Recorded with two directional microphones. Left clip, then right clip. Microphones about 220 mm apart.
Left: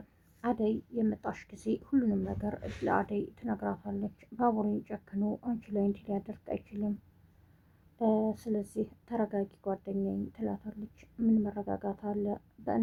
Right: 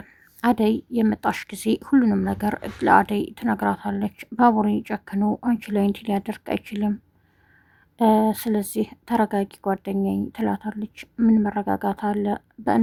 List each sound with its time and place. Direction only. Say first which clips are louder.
0.4 s a woman's voice: right 11 dB; 40° right (ahead or behind)
7.9 s a woman's voice: right 11 dB; 40° right (ahead or behind)